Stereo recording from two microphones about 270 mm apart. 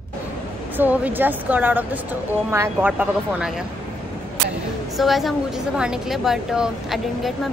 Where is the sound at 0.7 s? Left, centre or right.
Centre.